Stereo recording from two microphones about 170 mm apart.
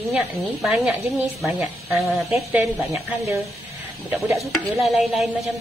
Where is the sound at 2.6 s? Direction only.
15° right (ahead or behind).